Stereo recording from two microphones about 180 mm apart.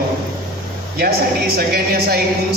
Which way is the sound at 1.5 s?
60° right (ahead or behind).